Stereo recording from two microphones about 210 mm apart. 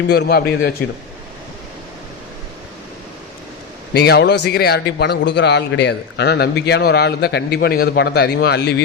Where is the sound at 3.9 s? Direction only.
50° left (ahead or behind).